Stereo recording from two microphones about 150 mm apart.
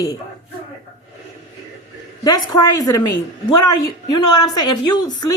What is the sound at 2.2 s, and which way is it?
A woman's voice, 25° left (ahead or behind).